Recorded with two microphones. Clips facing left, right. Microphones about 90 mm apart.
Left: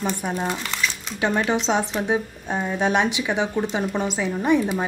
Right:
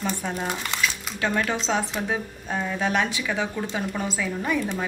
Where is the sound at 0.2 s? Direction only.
15° left (ahead or behind).